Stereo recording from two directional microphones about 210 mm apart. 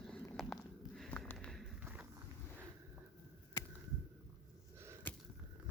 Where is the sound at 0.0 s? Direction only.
5° left (ahead or behind).